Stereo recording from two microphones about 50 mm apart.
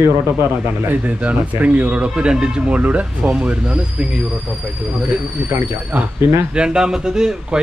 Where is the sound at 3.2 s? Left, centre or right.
Centre.